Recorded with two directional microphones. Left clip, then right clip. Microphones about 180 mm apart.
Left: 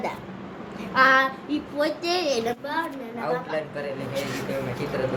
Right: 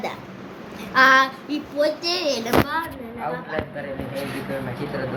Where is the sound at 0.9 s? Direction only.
15° right (ahead or behind).